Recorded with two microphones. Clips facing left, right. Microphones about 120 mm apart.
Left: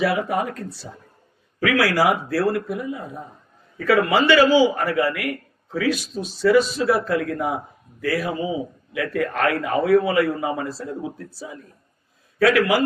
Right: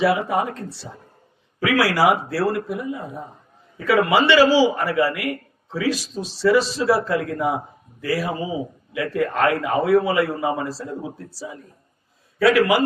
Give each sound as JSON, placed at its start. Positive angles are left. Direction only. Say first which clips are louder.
{"t": 0.0, "sound": "a man's voice", "louder": "right 2 dB", "side_deg": -25}